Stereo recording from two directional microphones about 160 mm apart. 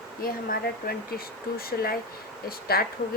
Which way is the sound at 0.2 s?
65° left (ahead or behind).